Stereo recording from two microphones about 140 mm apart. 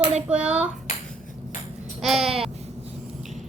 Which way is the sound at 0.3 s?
10° right (ahead or behind).